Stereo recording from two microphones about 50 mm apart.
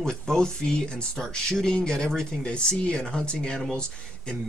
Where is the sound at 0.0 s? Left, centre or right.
Centre.